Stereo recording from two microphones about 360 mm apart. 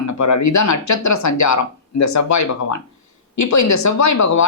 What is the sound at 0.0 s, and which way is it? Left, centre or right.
Speech, left.